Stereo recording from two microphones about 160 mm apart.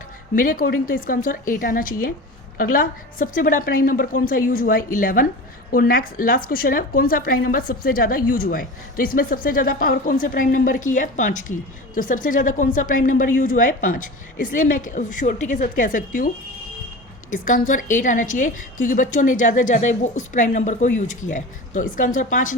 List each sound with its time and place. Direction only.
0.3 s speech: 60° left (ahead or behind)
17.3 s a woman's voice: 55° left (ahead or behind)